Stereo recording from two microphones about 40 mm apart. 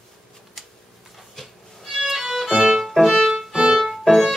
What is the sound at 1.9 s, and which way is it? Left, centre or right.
Violin, centre.